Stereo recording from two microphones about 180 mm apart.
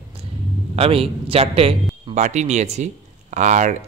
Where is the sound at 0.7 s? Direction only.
30° right (ahead or behind).